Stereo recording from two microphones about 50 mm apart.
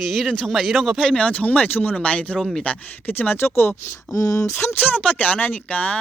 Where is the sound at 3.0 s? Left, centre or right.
Left.